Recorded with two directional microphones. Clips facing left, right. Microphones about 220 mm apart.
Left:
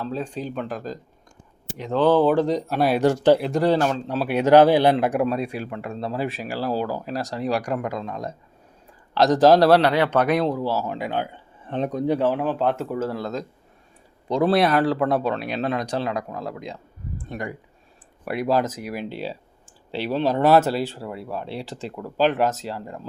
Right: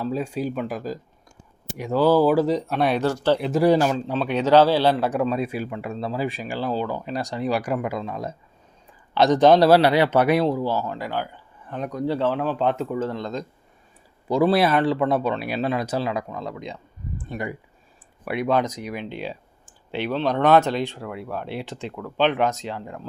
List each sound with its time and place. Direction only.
0.0 s speech: 10° right (ahead or behind)
3.0 s speech: 15° left (ahead or behind)
3.3 s speech: centre (ahead or behind)
4.1 s speech: 5° left (ahead or behind)
5.3 s speech: centre (ahead or behind)
10.8 s speech: 20° left (ahead or behind)